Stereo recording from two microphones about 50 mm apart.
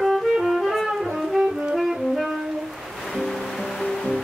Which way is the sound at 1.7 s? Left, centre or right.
Centre.